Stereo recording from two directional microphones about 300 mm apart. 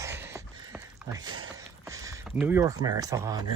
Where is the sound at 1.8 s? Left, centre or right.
Centre.